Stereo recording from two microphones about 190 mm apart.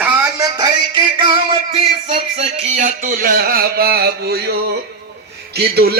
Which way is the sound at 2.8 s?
45° right (ahead or behind).